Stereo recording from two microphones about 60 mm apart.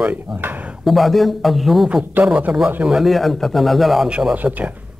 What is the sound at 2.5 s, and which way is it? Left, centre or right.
Speech, centre.